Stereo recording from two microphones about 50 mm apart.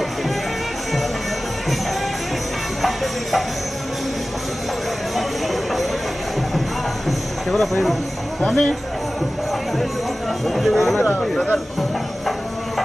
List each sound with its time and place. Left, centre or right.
2.8 s music: centre
7.1 s a sound: centre
8.4 s speech: centre
10.4 s speech: centre